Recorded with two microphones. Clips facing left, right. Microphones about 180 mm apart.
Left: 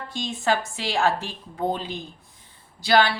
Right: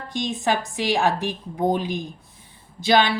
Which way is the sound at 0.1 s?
15° right (ahead or behind).